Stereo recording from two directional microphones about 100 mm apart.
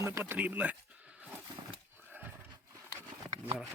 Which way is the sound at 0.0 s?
25° right (ahead or behind).